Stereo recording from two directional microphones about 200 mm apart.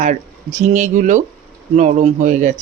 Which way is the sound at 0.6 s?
40° right (ahead or behind).